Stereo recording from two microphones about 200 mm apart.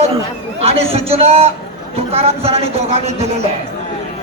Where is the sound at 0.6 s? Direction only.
30° right (ahead or behind).